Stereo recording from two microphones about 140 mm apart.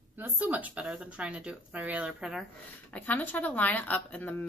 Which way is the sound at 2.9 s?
10° left (ahead or behind).